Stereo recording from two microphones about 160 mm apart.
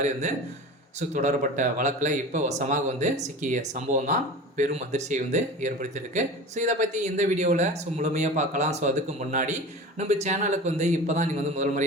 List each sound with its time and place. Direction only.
0.0 s a man's voice: 50° right (ahead or behind)